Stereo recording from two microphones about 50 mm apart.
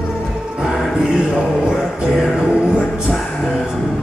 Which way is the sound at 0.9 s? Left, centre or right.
Centre.